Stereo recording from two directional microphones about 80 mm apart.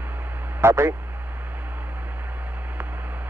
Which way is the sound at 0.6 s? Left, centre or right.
Right.